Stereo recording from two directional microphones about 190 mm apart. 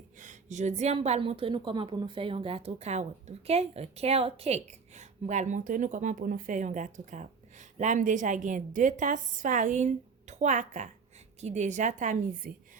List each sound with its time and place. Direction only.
0.2 s a woman's voice: 40° right (ahead or behind)